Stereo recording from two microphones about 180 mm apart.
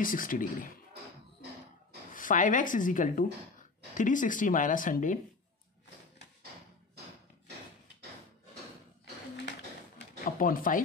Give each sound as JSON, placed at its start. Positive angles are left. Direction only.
{"t": 0.0, "sound": "speech", "side_deg": 50}
{"t": 2.1, "sound": "speech", "side_deg": 45}
{"t": 10.2, "sound": "speech", "side_deg": 50}